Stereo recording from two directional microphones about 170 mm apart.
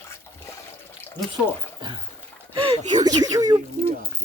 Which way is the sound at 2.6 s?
25° right (ahead or behind).